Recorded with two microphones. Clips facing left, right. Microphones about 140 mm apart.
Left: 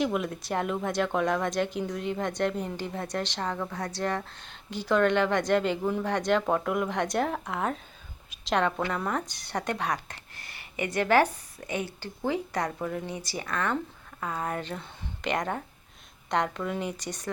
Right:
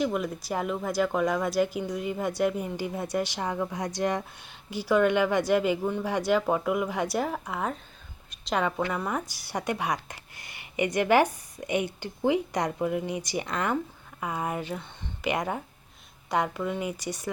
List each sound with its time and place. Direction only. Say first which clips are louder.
0.0 s speech: even; centre (ahead or behind)